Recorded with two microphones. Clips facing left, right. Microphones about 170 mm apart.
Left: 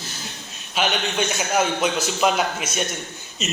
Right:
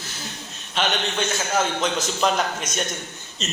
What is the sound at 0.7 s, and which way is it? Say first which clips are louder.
A man's voice: left 1 dB; 10° left (ahead or behind).